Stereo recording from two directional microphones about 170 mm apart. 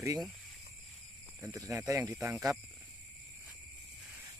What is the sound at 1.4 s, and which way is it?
Speech, 20° right (ahead or behind).